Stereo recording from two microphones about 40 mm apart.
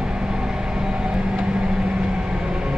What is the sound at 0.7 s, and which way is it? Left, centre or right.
Vehicle, centre.